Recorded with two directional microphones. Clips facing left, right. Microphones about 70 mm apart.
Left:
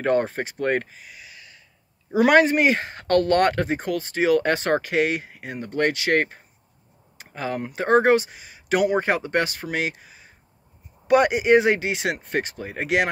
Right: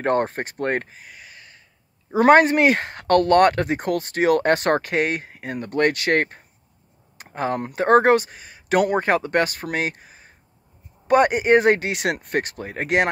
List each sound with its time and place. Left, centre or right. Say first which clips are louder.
0.0 s speech: even; right
2.4 s speech: right 2 dB; right
7.2 s a sound: right 4 dB; right
7.6 s speech: right 2 dB; right